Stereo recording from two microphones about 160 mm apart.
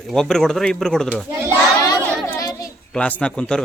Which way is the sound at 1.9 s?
20° left (ahead or behind).